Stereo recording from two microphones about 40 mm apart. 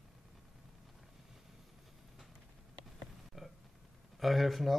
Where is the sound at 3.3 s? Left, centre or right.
Centre.